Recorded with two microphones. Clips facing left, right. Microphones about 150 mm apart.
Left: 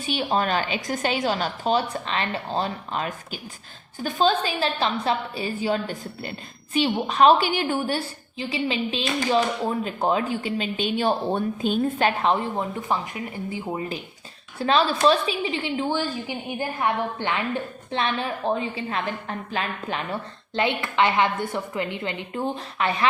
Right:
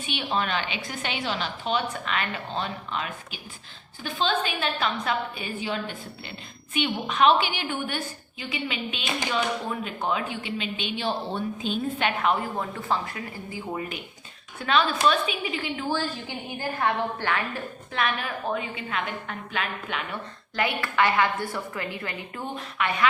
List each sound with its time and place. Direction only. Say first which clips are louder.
0.0 s a woman's voice: left 4 dB; 40° left (ahead or behind); by 13.8 s 20° left (ahead or behind)
14.6 s a woman's voice: left 3 dB; 35° left (ahead or behind)
16.0 s a woman's voice: left 3 dB; 15° left (ahead or behind); by 20.0 s 35° left (ahead or behind)
20.6 s a woman's voice: left 2 dB; 20° left (ahead or behind)